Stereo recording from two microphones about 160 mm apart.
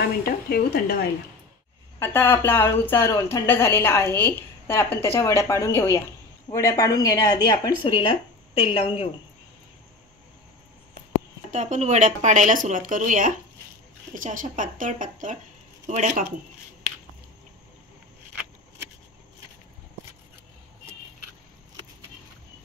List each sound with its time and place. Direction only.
0.0 s speech: 80° left
2.0 s a woman's voice: 15° left (ahead or behind); by 9.1 s 35° left (ahead or behind)
11.5 s speech: 50° right (ahead or behind)